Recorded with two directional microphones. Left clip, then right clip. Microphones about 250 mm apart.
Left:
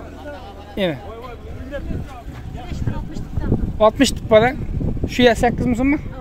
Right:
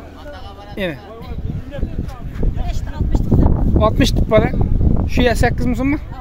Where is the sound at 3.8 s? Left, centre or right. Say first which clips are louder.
Left 2 dB; centre.